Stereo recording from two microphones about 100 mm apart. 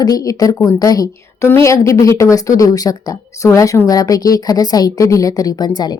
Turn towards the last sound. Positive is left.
turn(degrees=40)  # may be behind; listen again after turning